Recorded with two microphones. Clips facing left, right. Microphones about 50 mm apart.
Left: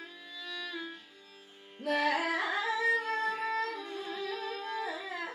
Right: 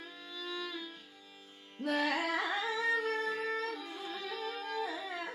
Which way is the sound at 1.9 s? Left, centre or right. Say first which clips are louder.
Left 3 dB; left.